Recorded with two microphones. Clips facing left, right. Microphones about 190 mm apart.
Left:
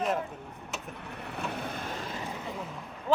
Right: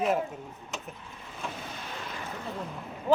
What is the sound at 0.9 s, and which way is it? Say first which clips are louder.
Vehicle: left 6 dB; 65° left (ahead or behind).